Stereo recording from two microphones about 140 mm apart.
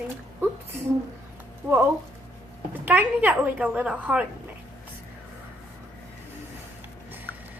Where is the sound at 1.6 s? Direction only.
15° right (ahead or behind).